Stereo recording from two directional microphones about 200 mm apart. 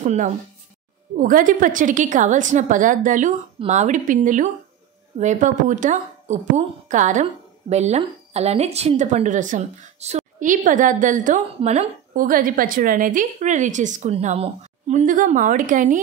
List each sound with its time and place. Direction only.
0.0 s a woman's voice: 40° right (ahead or behind)